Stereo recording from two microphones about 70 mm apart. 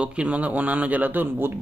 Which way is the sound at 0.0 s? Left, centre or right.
Centre.